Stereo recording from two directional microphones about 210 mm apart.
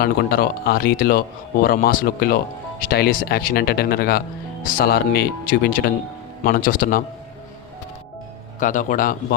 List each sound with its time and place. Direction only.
0.0 s speech: 45° left (ahead or behind)
8.5 s speech: 35° left (ahead or behind)